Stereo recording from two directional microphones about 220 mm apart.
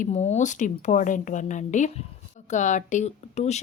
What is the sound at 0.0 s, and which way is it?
Speech, 30° left (ahead or behind).